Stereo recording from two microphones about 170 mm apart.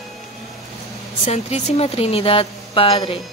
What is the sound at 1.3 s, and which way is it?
Speech, 40° left (ahead or behind).